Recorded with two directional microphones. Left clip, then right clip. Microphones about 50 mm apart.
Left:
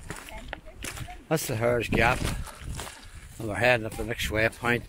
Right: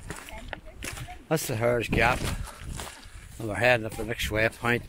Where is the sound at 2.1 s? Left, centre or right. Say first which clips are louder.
Even; left.